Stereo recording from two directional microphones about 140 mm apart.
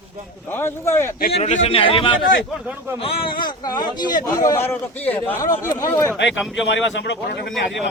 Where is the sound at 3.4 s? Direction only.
30° left (ahead or behind); by 5.4 s 15° left (ahead or behind).